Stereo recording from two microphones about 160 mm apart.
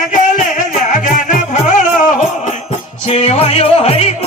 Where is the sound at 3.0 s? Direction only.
45° left (ahead or behind).